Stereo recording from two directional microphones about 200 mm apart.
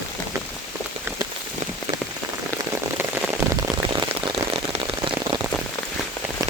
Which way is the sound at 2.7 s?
10° right (ahead or behind).